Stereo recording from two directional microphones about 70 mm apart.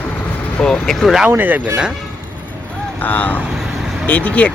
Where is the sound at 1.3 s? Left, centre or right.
Right.